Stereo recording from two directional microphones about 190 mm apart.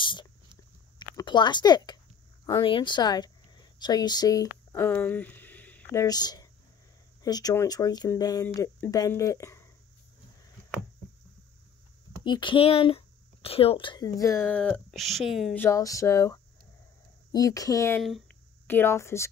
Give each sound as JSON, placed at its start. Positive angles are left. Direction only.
{"t": 0.0, "sound": "a sound", "side_deg": 25}
{"t": 2.4, "sound": "speech", "side_deg": 20}
{"t": 12.3, "sound": "speech", "side_deg": 25}
{"t": 15.5, "sound": "speech", "side_deg": 15}
{"t": 18.0, "sound": "a sound", "side_deg": 0}
{"t": 18.7, "sound": "speech", "side_deg": 10}